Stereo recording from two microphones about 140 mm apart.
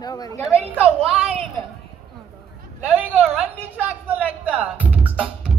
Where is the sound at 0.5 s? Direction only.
5° left (ahead or behind).